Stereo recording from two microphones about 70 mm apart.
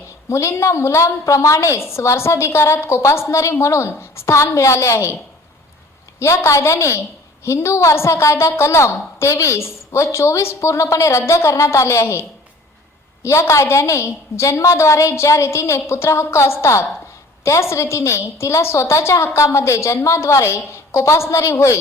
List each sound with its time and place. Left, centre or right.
0.3 s a woman's voice: left
6.1 s a woman's voice: left
13.2 s a woman's voice: left